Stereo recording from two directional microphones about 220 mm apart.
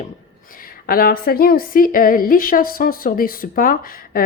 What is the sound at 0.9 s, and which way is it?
A woman's voice, 45° left (ahead or behind).